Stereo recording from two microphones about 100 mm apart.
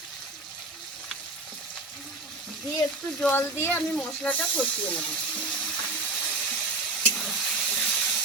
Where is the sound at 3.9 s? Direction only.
10° left (ahead or behind).